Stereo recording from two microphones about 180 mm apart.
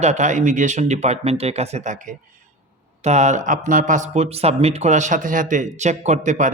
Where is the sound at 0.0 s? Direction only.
40° right (ahead or behind).